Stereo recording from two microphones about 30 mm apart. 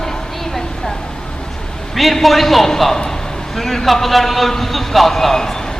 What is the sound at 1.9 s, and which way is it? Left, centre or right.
A man's voice, centre.